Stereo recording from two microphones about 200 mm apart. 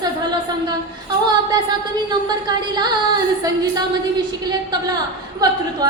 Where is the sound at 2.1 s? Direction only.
20° right (ahead or behind).